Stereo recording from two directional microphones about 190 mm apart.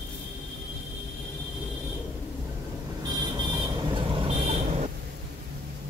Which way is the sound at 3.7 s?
25° right (ahead or behind).